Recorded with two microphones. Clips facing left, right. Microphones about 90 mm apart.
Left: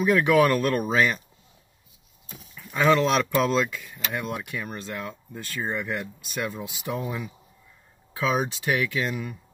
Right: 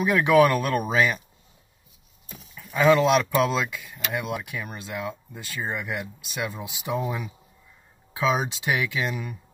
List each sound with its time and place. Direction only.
0.0 s speech: 15° right (ahead or behind)
2.5 s speech: 5° right (ahead or behind)